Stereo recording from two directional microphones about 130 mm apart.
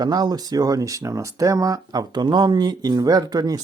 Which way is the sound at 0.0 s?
30° right (ahead or behind).